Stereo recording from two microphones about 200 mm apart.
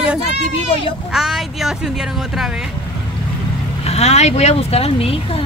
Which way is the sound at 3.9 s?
35° left (ahead or behind).